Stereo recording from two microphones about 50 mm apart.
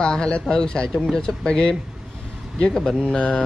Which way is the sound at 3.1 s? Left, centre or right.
Left.